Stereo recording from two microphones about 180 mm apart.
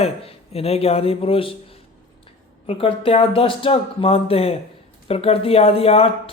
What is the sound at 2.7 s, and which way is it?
Speech, 30° left (ahead or behind).